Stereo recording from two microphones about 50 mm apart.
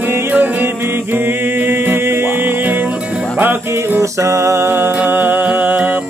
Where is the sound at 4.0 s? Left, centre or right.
Right.